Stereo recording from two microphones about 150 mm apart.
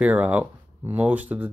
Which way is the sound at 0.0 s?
10° right (ahead or behind).